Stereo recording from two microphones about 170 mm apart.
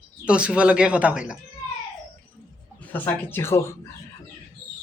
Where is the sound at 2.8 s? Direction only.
10° left (ahead or behind).